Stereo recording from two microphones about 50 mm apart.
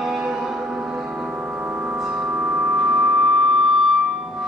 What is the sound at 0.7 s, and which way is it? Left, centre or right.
Music, right.